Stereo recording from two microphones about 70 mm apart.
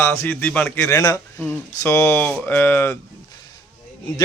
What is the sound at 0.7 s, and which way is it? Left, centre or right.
A man's voice, left.